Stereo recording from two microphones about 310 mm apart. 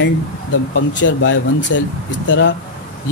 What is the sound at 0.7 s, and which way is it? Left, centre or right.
Speech, left.